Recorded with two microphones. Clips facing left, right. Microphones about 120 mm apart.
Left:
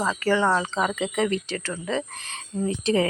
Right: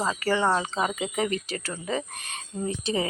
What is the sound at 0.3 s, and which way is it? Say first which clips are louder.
Speech: left 3 dB; 30° right (ahead or behind).